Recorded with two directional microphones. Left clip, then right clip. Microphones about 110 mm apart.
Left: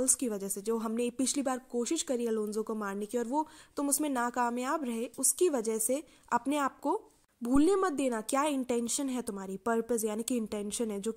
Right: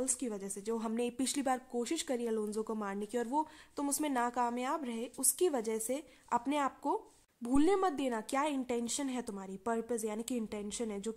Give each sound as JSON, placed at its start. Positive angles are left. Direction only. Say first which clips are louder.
{"t": 0.0, "sound": "a woman's voice", "louder": "left 6 dB", "side_deg": 30}